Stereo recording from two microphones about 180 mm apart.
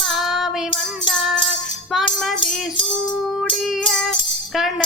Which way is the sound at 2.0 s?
30° left (ahead or behind).